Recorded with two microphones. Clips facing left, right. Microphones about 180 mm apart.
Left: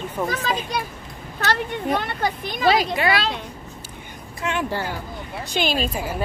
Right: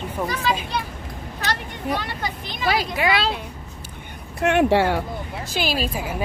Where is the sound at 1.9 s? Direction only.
50° left (ahead or behind).